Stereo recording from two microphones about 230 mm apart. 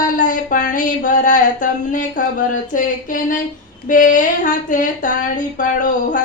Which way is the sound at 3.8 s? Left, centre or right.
Left.